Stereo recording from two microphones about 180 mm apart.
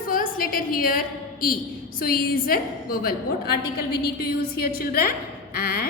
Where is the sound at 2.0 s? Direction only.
55° left (ahead or behind).